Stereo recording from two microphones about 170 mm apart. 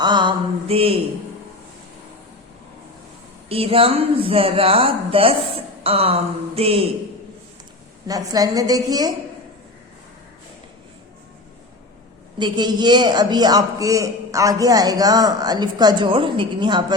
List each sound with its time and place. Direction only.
0.0 s mantra: 25° right (ahead or behind)
3.5 s a woman's voice: 35° right (ahead or behind)
8.0 s a man's voice: 20° right (ahead or behind)
12.4 s a man's voice: 25° right (ahead or behind)